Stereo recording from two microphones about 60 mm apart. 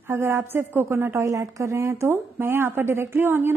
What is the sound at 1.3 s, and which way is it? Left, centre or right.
Speech, right.